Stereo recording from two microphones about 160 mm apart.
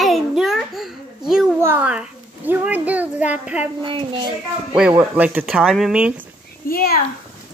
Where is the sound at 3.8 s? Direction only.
30° right (ahead or behind).